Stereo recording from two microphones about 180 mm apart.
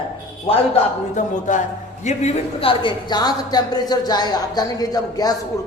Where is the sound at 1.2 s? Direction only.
45° left (ahead or behind).